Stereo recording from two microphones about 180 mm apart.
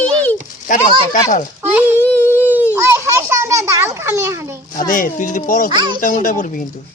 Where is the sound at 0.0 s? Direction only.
10° left (ahead or behind).